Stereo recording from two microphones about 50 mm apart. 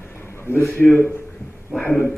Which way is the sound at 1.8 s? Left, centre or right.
Centre.